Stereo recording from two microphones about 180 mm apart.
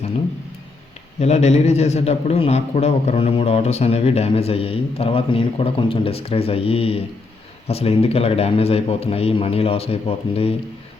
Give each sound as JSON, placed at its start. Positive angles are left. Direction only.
{"t": 1.2, "sound": "a man's voice", "side_deg": 40}